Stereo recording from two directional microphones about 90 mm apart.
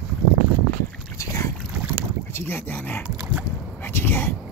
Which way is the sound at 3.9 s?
25° left (ahead or behind).